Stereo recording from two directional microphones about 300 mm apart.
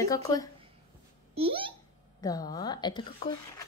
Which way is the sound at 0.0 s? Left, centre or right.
Centre.